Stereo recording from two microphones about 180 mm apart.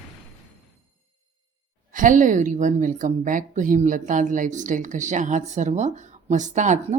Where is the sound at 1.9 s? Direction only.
45° right (ahead or behind).